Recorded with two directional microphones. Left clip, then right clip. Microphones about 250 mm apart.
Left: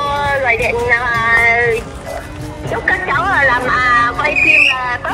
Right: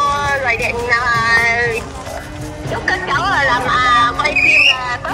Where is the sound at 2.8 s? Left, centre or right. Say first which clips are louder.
Left 2 dB; left.